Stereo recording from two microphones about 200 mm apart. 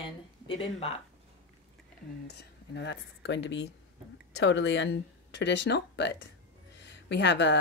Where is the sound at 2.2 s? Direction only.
55° left (ahead or behind).